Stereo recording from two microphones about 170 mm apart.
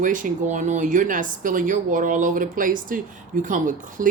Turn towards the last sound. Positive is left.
turn(degrees=-50)  # may be behind; listen again after turning